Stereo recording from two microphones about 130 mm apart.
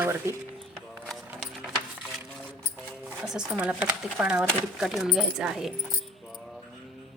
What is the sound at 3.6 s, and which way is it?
A woman's voice, 10° right (ahead or behind).